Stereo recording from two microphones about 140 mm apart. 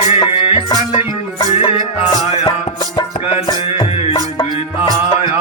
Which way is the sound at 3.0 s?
40° left (ahead or behind).